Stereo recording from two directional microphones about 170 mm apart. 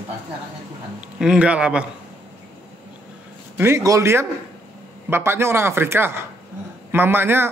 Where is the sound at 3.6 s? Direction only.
15° right (ahead or behind).